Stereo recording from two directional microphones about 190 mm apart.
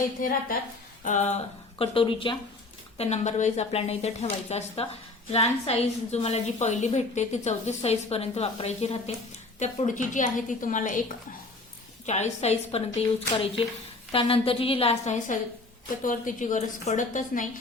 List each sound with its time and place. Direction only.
0.2 s a woman's voice: 45° left (ahead or behind)
1.8 s a woman's voice: 30° left (ahead or behind)
3.0 s a woman's voice: 35° left (ahead or behind)
12.0 s a woman's voice: 35° left (ahead or behind)